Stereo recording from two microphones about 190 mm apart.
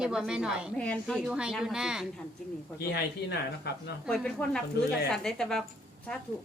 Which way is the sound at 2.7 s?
60° left (ahead or behind).